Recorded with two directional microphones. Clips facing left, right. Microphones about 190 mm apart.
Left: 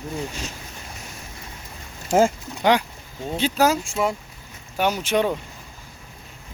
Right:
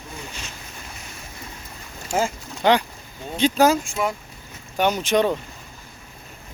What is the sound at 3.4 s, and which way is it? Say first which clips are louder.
Speech: right 3 dB; 5° left (ahead or behind).